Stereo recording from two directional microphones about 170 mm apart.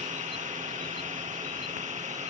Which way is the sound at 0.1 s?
45° right (ahead or behind).